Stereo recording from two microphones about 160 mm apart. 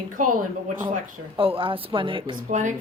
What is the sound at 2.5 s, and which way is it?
Speech, 50° right (ahead or behind).